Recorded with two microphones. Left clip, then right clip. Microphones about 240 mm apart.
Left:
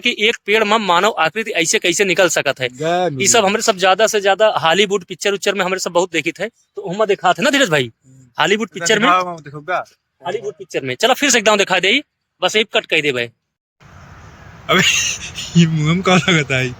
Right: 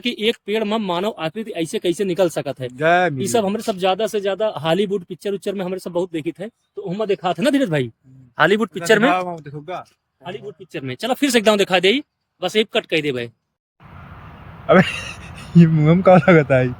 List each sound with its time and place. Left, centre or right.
0.0 s speech: centre
2.7 s speech: centre
3.2 s speech: centre
8.4 s a man's voice: right
9.0 s speech: centre
9.6 s speech: left
10.7 s speech: centre
11.2 s speech: centre
14.7 s a man's voice: centre